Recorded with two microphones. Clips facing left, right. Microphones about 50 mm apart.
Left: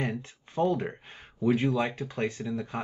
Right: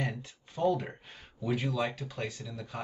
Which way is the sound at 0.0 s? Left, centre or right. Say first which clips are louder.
Left 4 dB; left.